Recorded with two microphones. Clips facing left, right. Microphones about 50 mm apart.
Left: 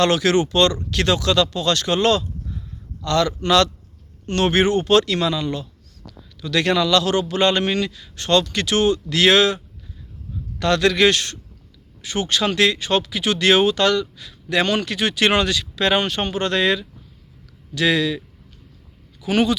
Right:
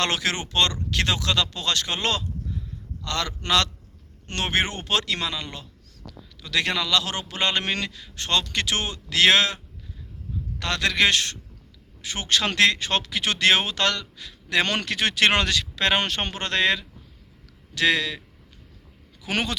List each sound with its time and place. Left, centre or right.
0.0 s speech: right
7.6 s speech: right
8.0 s speech: right
10.6 s speech: right
12.4 s speech: right
14.7 s speech: right
19.2 s speech: right